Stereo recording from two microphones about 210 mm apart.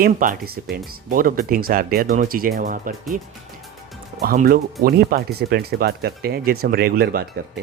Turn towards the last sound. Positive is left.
turn(degrees=-50)  # may be behind; listen again after turning